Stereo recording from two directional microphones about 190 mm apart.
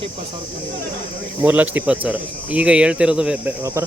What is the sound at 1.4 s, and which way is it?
Speech, 10° right (ahead or behind).